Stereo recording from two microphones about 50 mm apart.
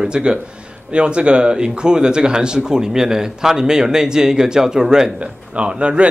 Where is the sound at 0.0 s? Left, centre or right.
Centre.